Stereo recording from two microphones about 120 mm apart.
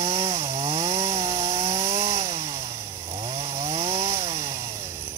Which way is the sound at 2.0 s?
30° right (ahead or behind).